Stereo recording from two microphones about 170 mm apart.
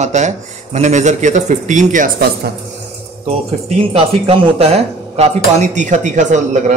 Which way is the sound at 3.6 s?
30° right (ahead or behind).